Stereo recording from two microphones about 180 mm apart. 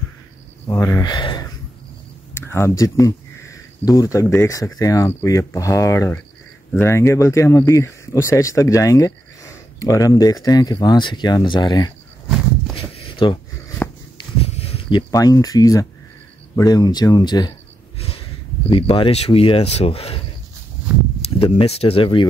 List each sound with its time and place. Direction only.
0.7 s speech: 20° left (ahead or behind)
2.4 s speech: 15° left (ahead or behind)
12.7 s a sound: 30° left (ahead or behind)
18.7 s speech: 30° left (ahead or behind)
21.2 s speech: 30° left (ahead or behind)